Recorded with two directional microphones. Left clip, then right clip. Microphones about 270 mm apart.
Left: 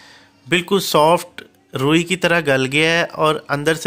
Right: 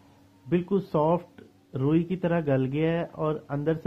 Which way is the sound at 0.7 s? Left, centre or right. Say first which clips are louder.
Left 12 dB; left.